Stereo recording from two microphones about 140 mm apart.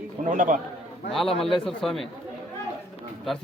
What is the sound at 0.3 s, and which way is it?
Speech, 70° right (ahead or behind).